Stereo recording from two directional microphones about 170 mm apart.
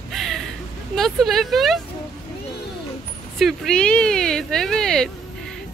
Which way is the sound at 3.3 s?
Centre (ahead or behind).